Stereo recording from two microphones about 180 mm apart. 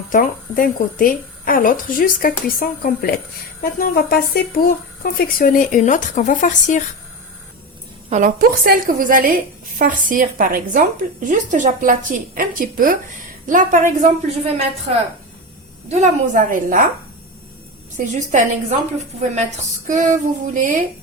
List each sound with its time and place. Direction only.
0.1 s speech: 50° left (ahead or behind)
8.1 s a woman's voice: 50° right (ahead or behind)
14.3 s a woman's voice: 35° right (ahead or behind)
17.9 s a woman's voice: 40° right (ahead or behind)
19.9 s a woman's voice: 45° right (ahead or behind)